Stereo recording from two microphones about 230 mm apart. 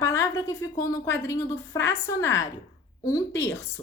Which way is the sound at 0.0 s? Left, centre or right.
Centre.